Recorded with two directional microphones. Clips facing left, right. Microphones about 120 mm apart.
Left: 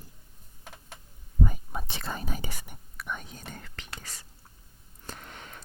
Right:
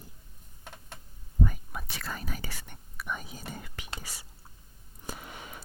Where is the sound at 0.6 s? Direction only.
5° left (ahead or behind).